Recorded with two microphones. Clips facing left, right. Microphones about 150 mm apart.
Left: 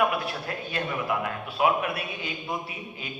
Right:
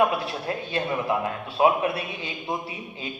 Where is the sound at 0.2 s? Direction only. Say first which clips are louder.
Right 3 dB; 25° right (ahead or behind).